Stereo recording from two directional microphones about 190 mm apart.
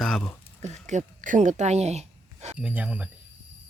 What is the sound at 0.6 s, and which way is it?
Speech, 35° right (ahead or behind).